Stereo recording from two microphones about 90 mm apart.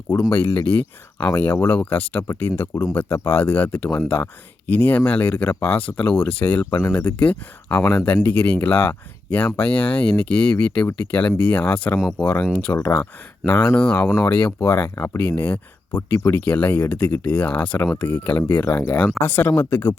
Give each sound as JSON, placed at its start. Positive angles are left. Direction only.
{"t": 0.1, "sound": "speech", "side_deg": 25}
{"t": 2.4, "sound": "speech", "side_deg": 30}
{"t": 18.6, "sound": "speech", "side_deg": 35}